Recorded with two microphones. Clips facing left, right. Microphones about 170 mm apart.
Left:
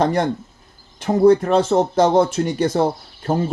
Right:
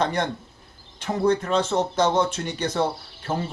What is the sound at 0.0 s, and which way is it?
Speech, 40° left (ahead or behind).